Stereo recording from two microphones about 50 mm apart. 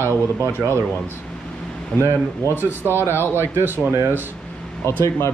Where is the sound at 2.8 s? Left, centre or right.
Right.